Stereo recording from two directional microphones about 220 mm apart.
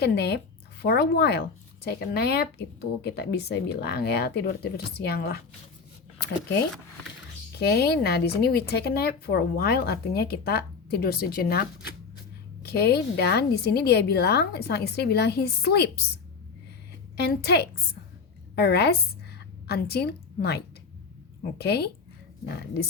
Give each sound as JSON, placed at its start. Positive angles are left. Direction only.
{"t": 0.0, "sound": "speech", "side_deg": 50}
{"t": 7.6, "sound": "speech", "side_deg": 45}
{"t": 17.2, "sound": "a woman's voice", "side_deg": 45}
{"t": 21.6, "sound": "speech", "side_deg": 50}